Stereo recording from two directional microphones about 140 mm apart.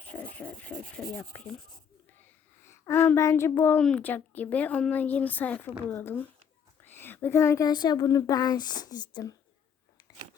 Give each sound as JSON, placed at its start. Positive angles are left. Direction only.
{"t": 0.2, "sound": "speech", "side_deg": 10}
{"t": 2.6, "sound": "speech", "side_deg": 20}